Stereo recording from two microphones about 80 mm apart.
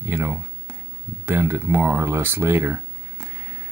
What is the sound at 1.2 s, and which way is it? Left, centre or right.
Speech, right.